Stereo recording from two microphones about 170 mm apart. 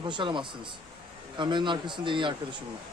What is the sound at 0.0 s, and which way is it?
A man's voice, 30° right (ahead or behind).